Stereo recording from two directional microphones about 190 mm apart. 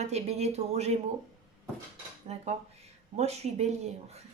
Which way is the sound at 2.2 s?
35° right (ahead or behind).